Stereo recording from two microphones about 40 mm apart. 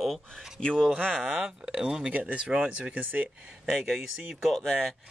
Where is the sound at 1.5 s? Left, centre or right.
Centre.